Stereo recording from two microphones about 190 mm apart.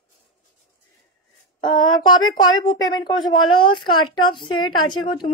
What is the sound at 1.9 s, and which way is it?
A woman's voice, 20° left (ahead or behind).